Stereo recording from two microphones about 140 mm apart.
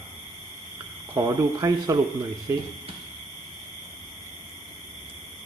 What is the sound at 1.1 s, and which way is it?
Speech, 25° right (ahead or behind).